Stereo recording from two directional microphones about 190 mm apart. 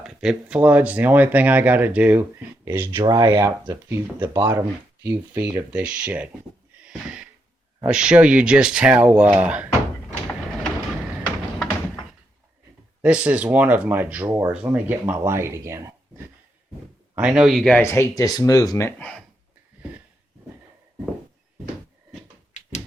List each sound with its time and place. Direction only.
0.0 s speech: 5° right (ahead or behind)
6.8 s a sound: 5° right (ahead or behind)
7.9 s speech: 5° right (ahead or behind)
13.0 s speech: 5° right (ahead or behind)